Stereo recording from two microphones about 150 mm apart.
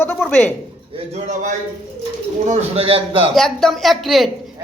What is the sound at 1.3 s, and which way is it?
A man's voice, 55° right (ahead or behind).